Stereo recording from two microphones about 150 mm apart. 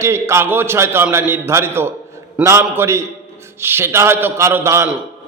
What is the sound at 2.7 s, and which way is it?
A man's voice, 15° right (ahead or behind).